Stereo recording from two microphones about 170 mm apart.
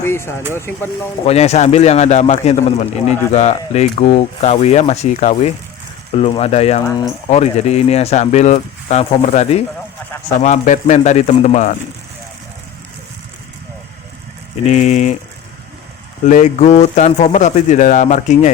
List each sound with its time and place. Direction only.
0.0 s speech: 15° left (ahead or behind)
1.2 s a man's voice: 40° left (ahead or behind)
6.8 s speech: 20° left (ahead or behind)
7.3 s a man's voice: 40° left (ahead or behind)
14.6 s speech: 45° left (ahead or behind)
16.2 s speech: 45° left (ahead or behind)